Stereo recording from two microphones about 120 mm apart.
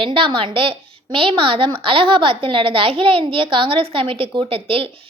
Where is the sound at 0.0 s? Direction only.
45° right (ahead or behind).